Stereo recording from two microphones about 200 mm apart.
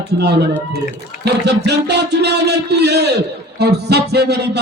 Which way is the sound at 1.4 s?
55° right (ahead or behind).